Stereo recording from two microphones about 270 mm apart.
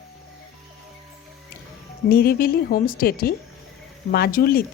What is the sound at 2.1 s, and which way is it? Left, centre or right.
A woman's voice, left.